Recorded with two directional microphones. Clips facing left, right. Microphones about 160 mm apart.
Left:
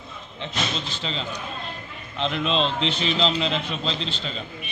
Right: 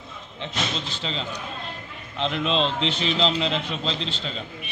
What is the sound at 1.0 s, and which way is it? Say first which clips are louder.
A man's voice: even; 30° right (ahead or behind).